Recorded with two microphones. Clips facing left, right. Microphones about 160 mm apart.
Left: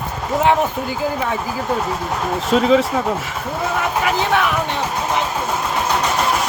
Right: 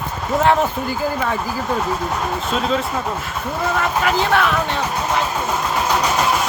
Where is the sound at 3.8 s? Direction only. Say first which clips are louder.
Even; 15° left (ahead or behind).